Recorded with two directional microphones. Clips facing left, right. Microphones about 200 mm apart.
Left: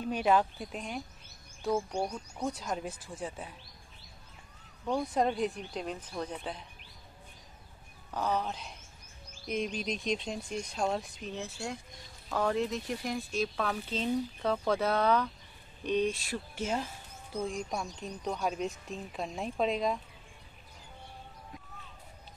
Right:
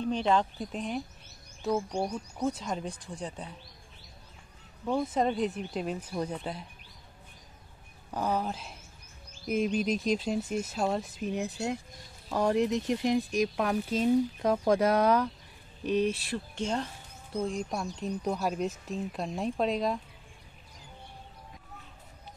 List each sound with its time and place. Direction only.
0.0 s speech: 10° left (ahead or behind)
4.8 s speech: 5° right (ahead or behind)
8.1 s speech: 10° right (ahead or behind)
11.2 s speech: 15° right (ahead or behind); by 20.0 s centre (ahead or behind)